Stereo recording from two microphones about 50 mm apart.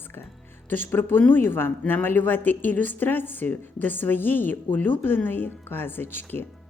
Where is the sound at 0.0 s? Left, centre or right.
Left.